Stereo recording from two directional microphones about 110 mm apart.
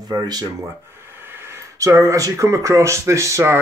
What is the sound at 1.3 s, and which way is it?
Speech, 25° right (ahead or behind).